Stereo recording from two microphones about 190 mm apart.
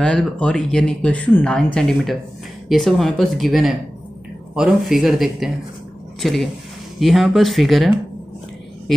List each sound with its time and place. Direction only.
0.0 s speech: 5° left (ahead or behind)